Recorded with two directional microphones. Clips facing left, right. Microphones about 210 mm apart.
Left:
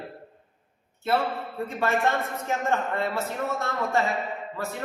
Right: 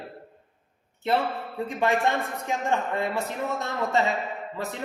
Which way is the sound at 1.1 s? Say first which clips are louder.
Even; 20° right (ahead or behind).